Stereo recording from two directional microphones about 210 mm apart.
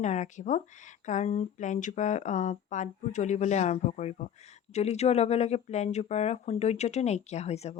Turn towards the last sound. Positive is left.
turn(degrees=30)  # may be behind; listen again after turning